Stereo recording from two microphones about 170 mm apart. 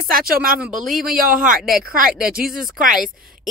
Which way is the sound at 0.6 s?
Centre (ahead or behind).